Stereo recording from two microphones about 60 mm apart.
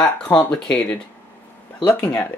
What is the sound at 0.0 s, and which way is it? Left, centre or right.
Speech, centre.